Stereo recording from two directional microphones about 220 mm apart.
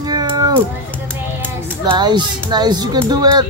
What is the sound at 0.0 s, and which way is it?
Cat, 20° right (ahead or behind).